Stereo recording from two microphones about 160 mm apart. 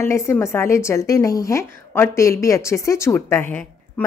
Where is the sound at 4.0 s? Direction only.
10° left (ahead or behind).